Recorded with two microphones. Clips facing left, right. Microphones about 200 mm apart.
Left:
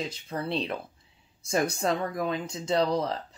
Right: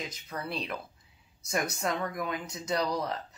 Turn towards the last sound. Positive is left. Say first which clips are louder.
# left 5 dB
turn(degrees=25)  # may be behind; listen again after turning